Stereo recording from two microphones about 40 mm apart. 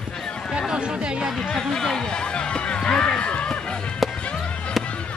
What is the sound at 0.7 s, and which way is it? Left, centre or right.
Chatter, right.